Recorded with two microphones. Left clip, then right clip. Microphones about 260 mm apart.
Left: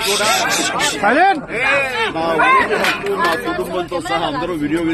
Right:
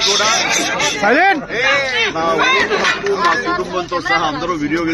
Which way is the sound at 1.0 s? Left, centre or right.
Right.